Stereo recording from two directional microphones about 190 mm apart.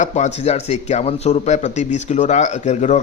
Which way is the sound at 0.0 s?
35° left (ahead or behind).